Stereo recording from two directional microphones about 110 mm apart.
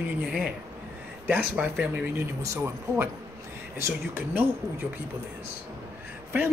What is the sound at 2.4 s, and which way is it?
Speech, 25° right (ahead or behind).